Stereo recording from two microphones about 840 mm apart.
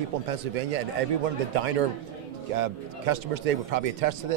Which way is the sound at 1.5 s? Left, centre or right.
Right.